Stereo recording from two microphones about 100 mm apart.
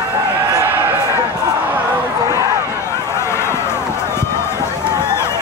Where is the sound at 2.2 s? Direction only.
35° right (ahead or behind).